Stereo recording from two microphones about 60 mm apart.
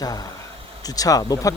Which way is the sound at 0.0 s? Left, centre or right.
Left.